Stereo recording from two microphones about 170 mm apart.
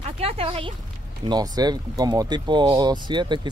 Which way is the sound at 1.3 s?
25° right (ahead or behind).